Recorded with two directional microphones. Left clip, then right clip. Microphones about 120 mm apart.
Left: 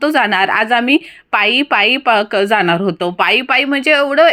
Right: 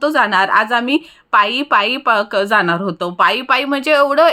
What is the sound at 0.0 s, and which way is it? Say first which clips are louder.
A woman's voice: left 1 dB; 25° left (ahead or behind).